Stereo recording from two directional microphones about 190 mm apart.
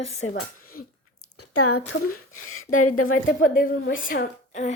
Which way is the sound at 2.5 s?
90° left.